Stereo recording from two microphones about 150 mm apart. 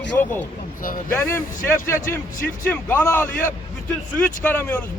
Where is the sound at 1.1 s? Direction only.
15° left (ahead or behind).